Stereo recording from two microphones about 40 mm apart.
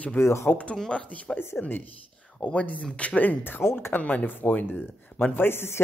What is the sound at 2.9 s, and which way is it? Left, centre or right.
Speech, left.